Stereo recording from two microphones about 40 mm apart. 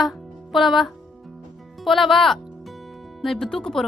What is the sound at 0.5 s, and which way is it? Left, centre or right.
Speech, centre.